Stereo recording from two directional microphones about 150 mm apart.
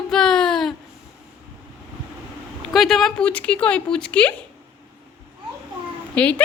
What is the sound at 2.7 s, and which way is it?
Speech, centre (ahead or behind).